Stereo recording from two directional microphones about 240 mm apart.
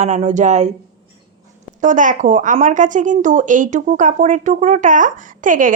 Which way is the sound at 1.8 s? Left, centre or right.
Right.